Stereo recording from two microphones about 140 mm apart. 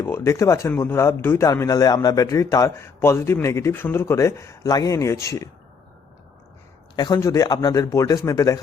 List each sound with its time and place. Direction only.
0.0 s a man's voice: 20° left (ahead or behind)
6.9 s a man's voice: 30° left (ahead or behind)